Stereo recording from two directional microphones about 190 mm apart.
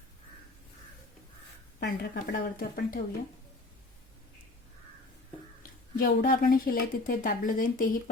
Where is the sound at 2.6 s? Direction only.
50° left (ahead or behind).